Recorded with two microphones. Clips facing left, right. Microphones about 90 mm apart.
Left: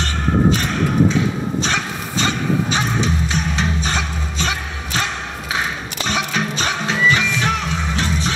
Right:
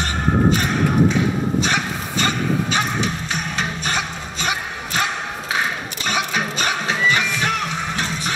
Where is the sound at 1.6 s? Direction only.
10° right (ahead or behind).